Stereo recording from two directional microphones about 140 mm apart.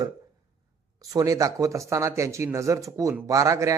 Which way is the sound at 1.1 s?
25° right (ahead or behind).